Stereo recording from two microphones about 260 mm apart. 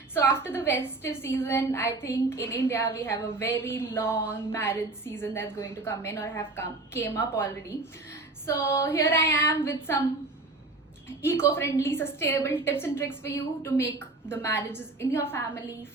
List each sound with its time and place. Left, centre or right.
0.1 s a woman's voice: centre
11.2 s a woman's voice: centre